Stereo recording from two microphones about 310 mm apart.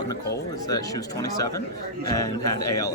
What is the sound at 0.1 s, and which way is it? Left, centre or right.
Speech, centre.